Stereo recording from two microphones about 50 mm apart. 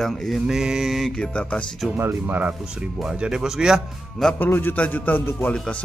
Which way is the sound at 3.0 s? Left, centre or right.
Centre.